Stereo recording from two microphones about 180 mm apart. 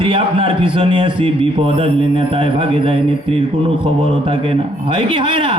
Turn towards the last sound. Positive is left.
turn(degrees=-30)  # may be behind; listen again after turning